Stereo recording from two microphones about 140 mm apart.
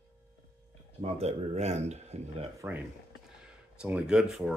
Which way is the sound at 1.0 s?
45° right (ahead or behind).